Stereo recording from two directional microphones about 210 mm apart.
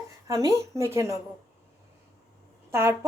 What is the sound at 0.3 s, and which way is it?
Speech, 15° right (ahead or behind).